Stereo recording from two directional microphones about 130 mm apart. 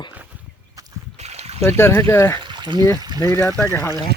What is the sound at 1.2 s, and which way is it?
Boat, 55° right (ahead or behind).